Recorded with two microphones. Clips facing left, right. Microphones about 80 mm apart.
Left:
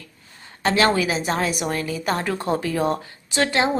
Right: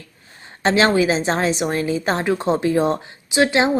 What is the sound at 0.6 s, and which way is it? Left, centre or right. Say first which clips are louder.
A woman's voice: right 3 dB; right.